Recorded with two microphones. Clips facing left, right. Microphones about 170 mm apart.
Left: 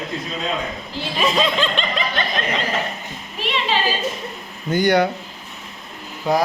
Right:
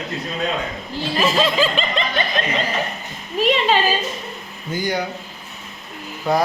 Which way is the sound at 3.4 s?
45° right (ahead or behind).